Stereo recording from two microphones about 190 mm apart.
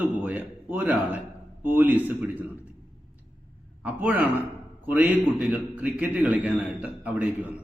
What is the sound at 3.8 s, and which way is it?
A man's voice, 10° right (ahead or behind).